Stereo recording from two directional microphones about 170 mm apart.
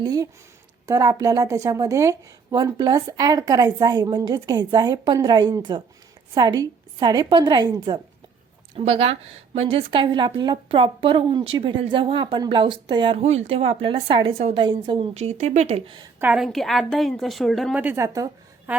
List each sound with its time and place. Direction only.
0.0 s speech: 20° right (ahead or behind)
8.7 s a woman's voice: 35° right (ahead or behind)
16.2 s a woman's voice: 5° right (ahead or behind)
17.8 s a woman's voice: 15° right (ahead or behind)